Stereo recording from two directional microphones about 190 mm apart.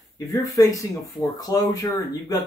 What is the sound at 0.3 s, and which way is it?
Speech, 15° left (ahead or behind).